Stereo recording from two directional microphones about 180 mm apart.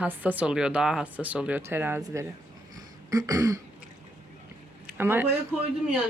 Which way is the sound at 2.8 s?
20° right (ahead or behind).